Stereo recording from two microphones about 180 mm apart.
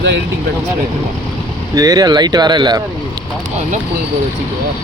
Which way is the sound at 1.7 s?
20° right (ahead or behind).